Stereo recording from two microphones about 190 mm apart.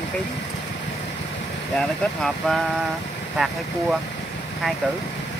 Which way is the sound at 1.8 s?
Centre (ahead or behind).